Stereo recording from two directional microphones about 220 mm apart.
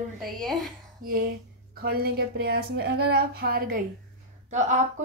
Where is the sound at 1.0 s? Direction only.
40° right (ahead or behind).